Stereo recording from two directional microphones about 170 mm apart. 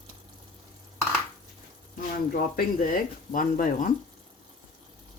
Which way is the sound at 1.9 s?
55° left (ahead or behind).